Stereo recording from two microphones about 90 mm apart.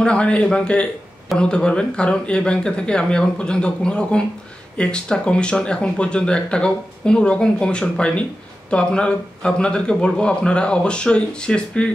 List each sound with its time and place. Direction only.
0.0 s speech: 10° left (ahead or behind)